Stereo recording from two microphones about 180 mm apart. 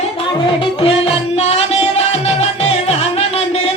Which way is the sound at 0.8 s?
30° left (ahead or behind).